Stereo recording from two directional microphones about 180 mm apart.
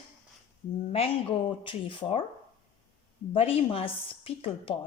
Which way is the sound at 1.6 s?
30° left (ahead or behind).